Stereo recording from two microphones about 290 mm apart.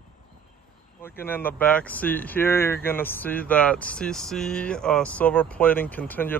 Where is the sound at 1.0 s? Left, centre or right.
Centre.